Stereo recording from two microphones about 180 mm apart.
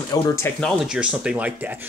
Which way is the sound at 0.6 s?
5° right (ahead or behind).